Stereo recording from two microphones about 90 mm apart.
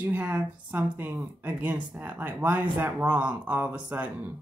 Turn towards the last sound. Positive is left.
turn(degrees=-15)  # may be behind; listen again after turning